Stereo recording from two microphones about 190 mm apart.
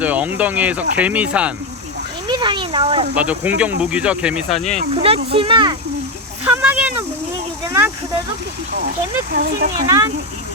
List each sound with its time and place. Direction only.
0.0 s speech: 10° right (ahead or behind)
2.2 s speech: 25° right (ahead or behind)
3.2 s speech: 5° right (ahead or behind)
4.5 s speech: 35° left (ahead or behind)
4.8 s speech: 30° right (ahead or behind)
6.4 s a sound: 10° right (ahead or behind)
9.3 s speech: 55° right (ahead or behind)
9.8 s speech: 15° right (ahead or behind)